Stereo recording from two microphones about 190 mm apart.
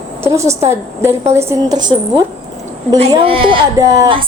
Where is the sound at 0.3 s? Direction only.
15° right (ahead or behind).